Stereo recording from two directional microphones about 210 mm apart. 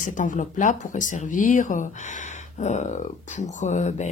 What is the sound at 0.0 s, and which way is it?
Speech, 40° left (ahead or behind).